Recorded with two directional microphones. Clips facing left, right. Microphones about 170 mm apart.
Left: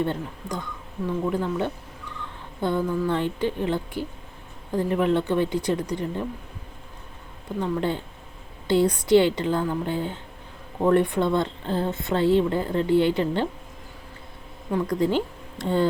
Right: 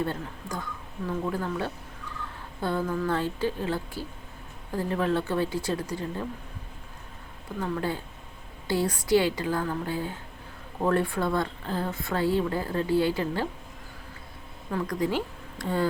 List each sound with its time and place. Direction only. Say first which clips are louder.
0.0 s speech: left 4 dB; 20° left (ahead or behind)
7.6 s speech: left 4 dB; 25° left (ahead or behind)
14.7 s speech: left 5 dB; 25° left (ahead or behind)